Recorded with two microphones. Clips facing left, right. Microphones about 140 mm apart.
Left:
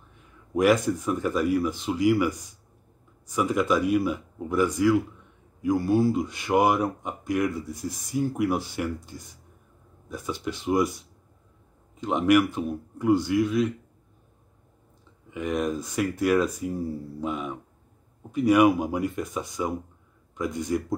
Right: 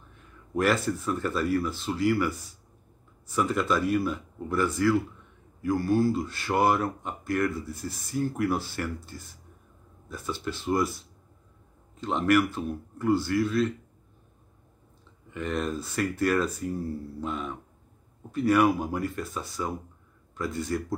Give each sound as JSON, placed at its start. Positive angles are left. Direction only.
{"t": 0.6, "sound": "speech", "side_deg": 15}
{"t": 15.3, "sound": "speech", "side_deg": 10}